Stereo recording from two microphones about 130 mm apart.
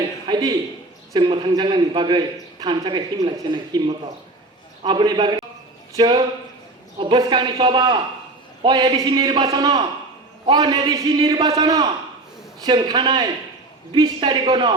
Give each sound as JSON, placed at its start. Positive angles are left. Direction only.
{"t": 0.3, "sound": "a man's voice", "side_deg": -30}
{"t": 4.9, "sound": "a man's voice", "side_deg": -35}